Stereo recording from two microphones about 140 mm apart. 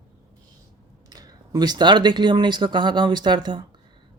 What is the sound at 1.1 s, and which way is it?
Speech, 25° right (ahead or behind).